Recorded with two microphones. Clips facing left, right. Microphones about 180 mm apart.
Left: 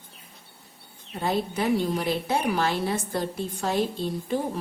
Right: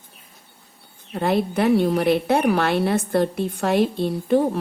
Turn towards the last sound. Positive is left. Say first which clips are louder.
# right 8 dB
turn(degrees=-65)  # may be behind; listen again after turning